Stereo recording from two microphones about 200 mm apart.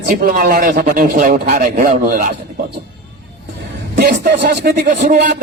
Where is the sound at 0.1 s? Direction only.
45° right (ahead or behind).